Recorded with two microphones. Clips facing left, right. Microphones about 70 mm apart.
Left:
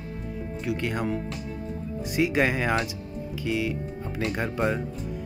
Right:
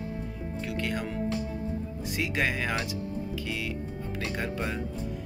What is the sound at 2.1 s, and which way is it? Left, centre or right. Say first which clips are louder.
Speech: left 6 dB; left.